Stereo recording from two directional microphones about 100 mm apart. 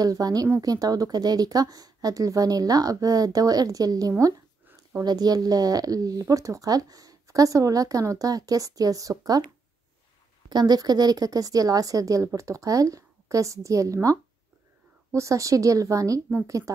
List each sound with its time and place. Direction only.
0.0 s speech: 40° right (ahead or behind)
10.5 s speech: 45° right (ahead or behind)